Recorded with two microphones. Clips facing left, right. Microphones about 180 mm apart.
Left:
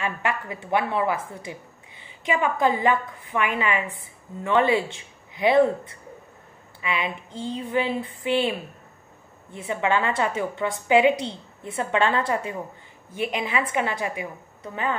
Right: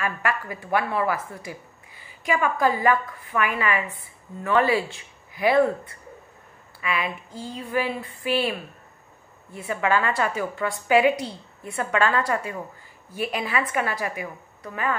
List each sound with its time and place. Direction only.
0.0 s a woman's voice: 20° left (ahead or behind)
1.3 s a sound: 20° left (ahead or behind)
2.6 s a woman's voice: 20° left (ahead or behind)